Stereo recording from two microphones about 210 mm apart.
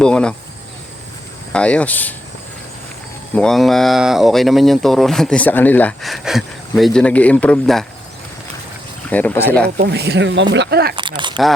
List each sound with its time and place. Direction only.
0.0 s speech: 5° left (ahead or behind)
1.5 s speech: 5° left (ahead or behind)
3.3 s speech: centre (ahead or behind)
9.0 s speech: 5° left (ahead or behind)
9.6 s speech: 50° right (ahead or behind)
10.9 s speech: 20° right (ahead or behind)